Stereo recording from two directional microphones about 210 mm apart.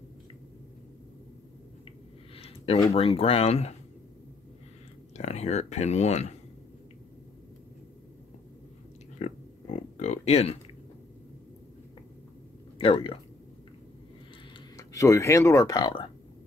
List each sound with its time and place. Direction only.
2.3 s a sound: 25° left (ahead or behind)
2.9 s speech: 30° left (ahead or behind)
5.1 s speech: 30° left (ahead or behind)
9.2 s a sound: 30° left (ahead or behind)
12.7 s speech: 25° left (ahead or behind)
14.8 s speech: 15° left (ahead or behind)